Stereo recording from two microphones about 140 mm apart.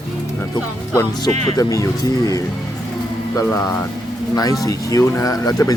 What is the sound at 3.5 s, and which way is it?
Speech, 20° left (ahead or behind).